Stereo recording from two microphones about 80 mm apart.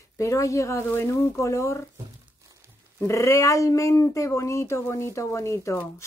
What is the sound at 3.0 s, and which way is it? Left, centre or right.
Speech, left.